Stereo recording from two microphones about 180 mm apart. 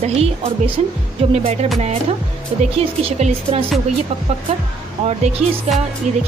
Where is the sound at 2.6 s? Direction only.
35° right (ahead or behind).